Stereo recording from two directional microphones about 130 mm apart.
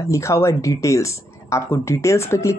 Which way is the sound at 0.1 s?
20° left (ahead or behind).